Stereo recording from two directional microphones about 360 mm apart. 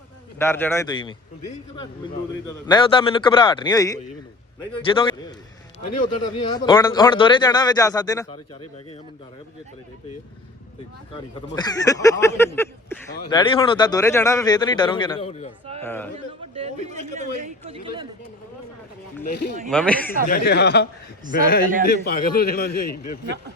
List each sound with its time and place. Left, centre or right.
0.3 s speech: centre
2.6 s speech: centre
11.5 s speech: centre
16.6 s speech: centre
19.6 s speech: centre
20.2 s a man's voice: left
21.7 s a man's voice: right
22.0 s a man's voice: left